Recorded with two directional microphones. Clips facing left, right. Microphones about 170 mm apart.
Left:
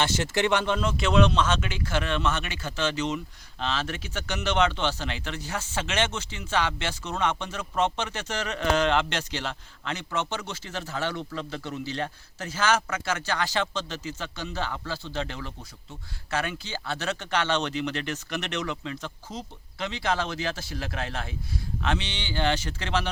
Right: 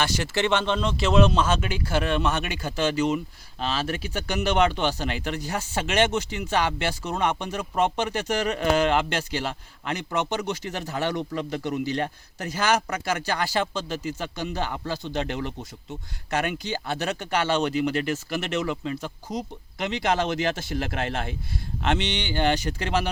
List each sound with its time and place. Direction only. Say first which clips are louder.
0.0 s speech: even; 20° left (ahead or behind); by 20.7 s 20° right (ahead or behind)
22.0 s speech: right 4 dB; 20° right (ahead or behind)